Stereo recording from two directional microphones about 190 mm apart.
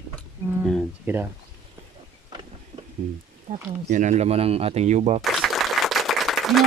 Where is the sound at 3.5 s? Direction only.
40° right (ahead or behind).